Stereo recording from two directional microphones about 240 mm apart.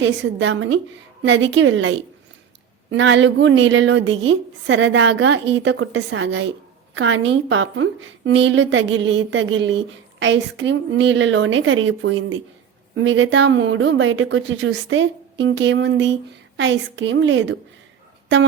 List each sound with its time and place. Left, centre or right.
0.0 s speech: right